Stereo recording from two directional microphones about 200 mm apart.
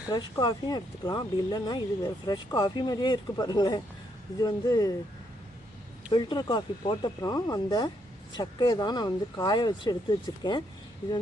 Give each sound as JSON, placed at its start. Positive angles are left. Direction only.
{"t": 0.1, "sound": "speech", "side_deg": 20}
{"t": 6.1, "sound": "speech", "side_deg": 20}